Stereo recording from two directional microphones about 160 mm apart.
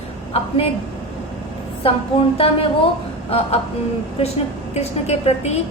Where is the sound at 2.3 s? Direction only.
35° left (ahead or behind).